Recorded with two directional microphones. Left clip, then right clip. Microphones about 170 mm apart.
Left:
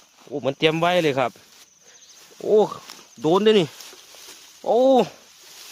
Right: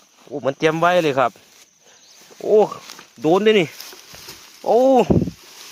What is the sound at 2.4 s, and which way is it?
Speech, 10° left (ahead or behind).